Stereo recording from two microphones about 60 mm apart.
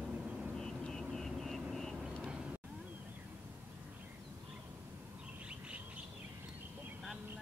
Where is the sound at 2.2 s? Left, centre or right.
Centre.